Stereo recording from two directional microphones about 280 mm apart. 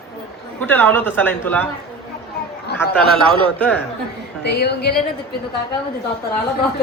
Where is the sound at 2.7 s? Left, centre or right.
Left.